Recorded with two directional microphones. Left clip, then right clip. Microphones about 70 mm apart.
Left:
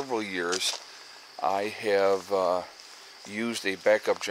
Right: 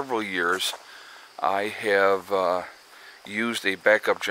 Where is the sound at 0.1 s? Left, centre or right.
Right.